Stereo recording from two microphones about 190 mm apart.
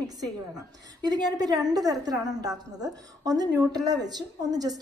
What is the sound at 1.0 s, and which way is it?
A woman's voice, 20° right (ahead or behind).